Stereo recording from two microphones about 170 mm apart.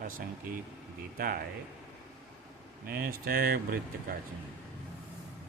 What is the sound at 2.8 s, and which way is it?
Speech, 60° right (ahead or behind).